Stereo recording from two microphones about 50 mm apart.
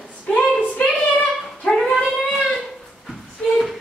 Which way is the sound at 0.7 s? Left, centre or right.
Left.